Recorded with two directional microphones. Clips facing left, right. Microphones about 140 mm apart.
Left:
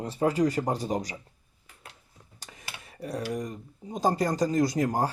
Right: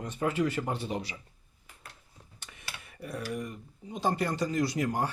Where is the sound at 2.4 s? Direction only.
40° left (ahead or behind).